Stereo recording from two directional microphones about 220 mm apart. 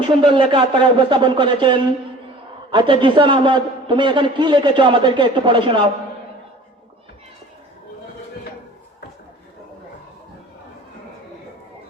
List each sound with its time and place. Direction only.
0.2 s a man's voice: 25° right (ahead or behind)